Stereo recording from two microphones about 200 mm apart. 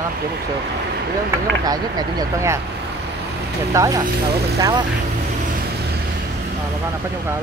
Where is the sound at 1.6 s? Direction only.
20° right (ahead or behind).